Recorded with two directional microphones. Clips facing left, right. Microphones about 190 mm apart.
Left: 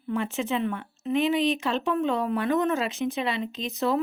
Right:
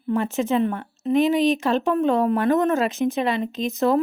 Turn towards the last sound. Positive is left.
turn(degrees=-45)  # may be behind; listen again after turning